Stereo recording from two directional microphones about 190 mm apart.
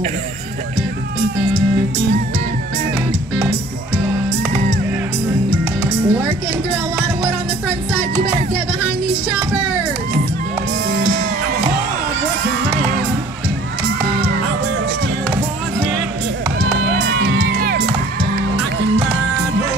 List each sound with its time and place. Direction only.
5.8 s music: 10° right (ahead or behind)
17.1 s music: 60° right (ahead or behind)